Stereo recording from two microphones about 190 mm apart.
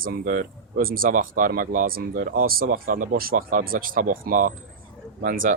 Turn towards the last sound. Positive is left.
turn(degrees=-50)  # may be behind; listen again after turning